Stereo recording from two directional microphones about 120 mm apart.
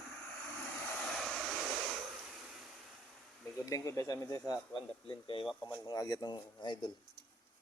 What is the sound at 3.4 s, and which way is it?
A man's voice, 25° left (ahead or behind).